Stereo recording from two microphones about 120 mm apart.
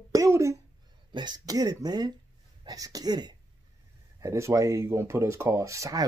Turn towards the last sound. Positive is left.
turn(degrees=-25)  # may be behind; listen again after turning